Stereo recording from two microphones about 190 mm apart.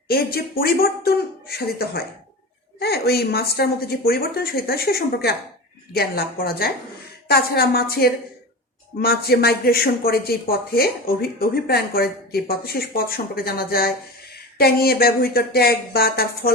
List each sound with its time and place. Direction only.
0.1 s a woman's voice: 55° left (ahead or behind)